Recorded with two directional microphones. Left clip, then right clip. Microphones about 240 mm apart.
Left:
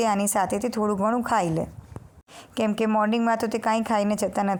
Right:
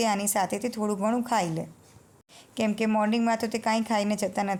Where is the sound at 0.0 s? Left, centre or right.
Left.